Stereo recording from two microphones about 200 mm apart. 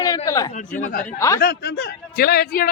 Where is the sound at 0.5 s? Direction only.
40° left (ahead or behind).